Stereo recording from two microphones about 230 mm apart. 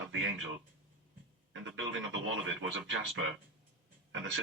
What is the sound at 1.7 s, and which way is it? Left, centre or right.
Speech, right.